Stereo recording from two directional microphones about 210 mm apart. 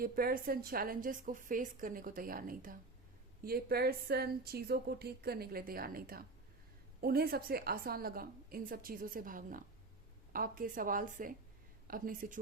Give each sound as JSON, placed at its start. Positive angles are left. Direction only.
{"t": 0.0, "sound": "a woman's voice", "side_deg": -45}